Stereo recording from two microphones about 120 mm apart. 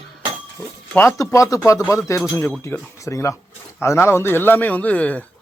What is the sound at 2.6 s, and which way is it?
Speech, 25° left (ahead or behind).